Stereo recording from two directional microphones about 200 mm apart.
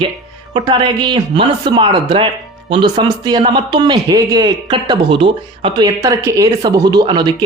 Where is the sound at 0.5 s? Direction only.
20° right (ahead or behind).